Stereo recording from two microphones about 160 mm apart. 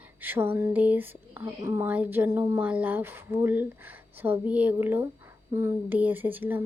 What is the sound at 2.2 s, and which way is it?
Speech, 20° right (ahead or behind).